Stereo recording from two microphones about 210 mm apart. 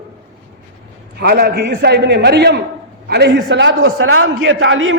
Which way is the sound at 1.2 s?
50° right (ahead or behind).